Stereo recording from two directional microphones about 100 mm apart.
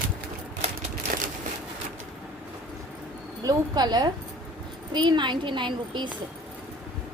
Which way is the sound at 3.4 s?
40° right (ahead or behind).